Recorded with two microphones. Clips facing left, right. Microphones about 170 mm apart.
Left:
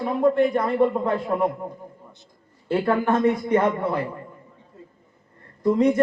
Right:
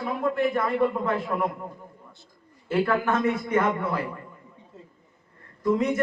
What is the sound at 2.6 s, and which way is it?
A man's voice, 30° left (ahead or behind).